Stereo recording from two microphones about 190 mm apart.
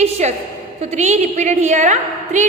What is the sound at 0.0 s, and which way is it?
A woman's voice, 35° right (ahead or behind).